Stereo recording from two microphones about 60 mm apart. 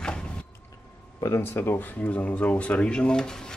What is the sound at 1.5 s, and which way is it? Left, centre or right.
Speech, left.